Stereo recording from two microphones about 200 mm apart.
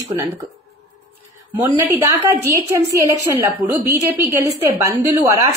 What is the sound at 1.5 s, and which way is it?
Speech, 10° right (ahead or behind).